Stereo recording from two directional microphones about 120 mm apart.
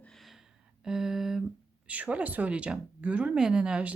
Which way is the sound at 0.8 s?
5° right (ahead or behind).